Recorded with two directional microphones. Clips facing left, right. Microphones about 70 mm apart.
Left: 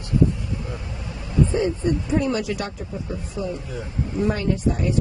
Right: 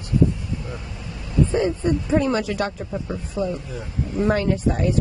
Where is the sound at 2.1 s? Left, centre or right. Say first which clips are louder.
Right 2 dB; right.